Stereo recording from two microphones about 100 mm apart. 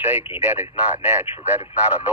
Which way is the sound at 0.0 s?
20° right (ahead or behind).